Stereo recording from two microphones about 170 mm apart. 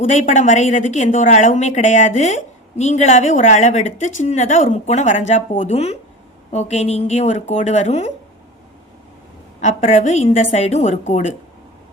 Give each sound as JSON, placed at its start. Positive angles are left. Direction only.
{"t": 0.0, "sound": "a woman's voice", "side_deg": 45}
{"t": 9.6, "sound": "a woman's voice", "side_deg": 40}